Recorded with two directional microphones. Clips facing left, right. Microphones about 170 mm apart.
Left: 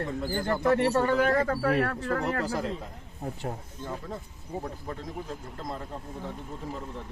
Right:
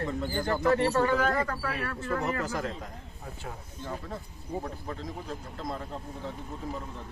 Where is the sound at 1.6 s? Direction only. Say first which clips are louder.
Left 7 dB; 60° left (ahead or behind).